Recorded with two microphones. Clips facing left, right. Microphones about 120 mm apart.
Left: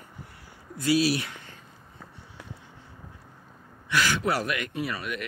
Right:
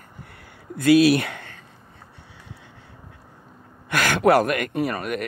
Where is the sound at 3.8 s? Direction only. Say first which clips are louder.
Right 7 dB; 55° right (ahead or behind).